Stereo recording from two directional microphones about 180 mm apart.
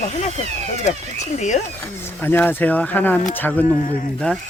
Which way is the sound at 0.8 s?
40° left (ahead or behind).